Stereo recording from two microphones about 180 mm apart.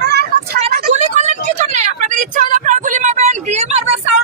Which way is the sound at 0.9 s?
40° right (ahead or behind).